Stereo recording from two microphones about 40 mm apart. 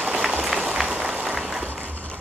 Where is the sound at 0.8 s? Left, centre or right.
Right.